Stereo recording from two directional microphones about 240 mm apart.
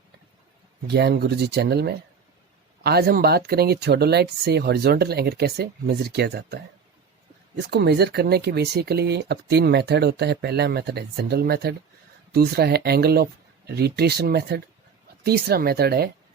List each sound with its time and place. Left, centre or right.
0.9 s speech: right